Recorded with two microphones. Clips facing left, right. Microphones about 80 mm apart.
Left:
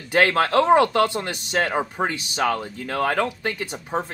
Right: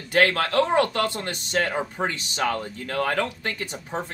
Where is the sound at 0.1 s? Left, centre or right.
Left.